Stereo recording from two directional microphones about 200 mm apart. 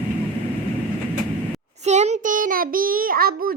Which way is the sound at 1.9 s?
35° right (ahead or behind).